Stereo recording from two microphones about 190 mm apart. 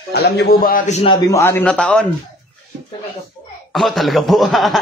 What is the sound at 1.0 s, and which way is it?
A man's voice, 20° left (ahead or behind).